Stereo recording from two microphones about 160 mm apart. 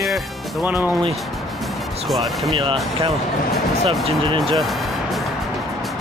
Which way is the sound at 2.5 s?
35° right (ahead or behind).